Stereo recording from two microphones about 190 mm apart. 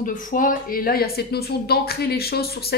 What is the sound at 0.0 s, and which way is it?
A woman's voice, 45° left (ahead or behind).